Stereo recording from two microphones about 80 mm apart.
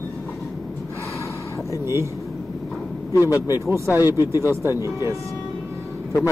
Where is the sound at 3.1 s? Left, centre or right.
Left.